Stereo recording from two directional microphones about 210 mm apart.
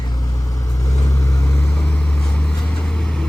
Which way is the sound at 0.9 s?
15° left (ahead or behind).